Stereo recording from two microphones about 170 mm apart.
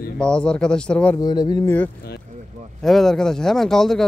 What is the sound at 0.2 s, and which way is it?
Speech, 5° left (ahead or behind).